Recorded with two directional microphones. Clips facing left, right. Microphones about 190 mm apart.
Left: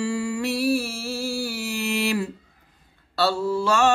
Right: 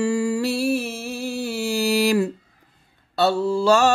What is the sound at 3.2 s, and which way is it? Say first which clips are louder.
Mantra: right 3 dB; 20° right (ahead or behind).